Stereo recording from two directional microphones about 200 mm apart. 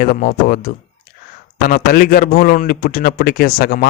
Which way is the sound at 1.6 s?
50° left (ahead or behind).